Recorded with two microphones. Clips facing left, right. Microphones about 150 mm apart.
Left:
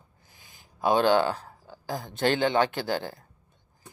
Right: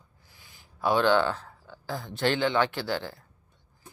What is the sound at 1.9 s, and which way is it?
Speech, 45° left (ahead or behind).